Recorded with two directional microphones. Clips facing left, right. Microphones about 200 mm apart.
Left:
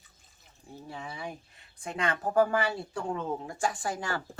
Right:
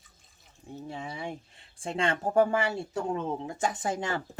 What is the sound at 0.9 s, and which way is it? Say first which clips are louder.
Speech: right 2 dB; 25° right (ahead or behind).